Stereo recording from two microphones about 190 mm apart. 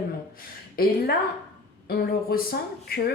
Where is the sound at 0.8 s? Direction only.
50° left (ahead or behind).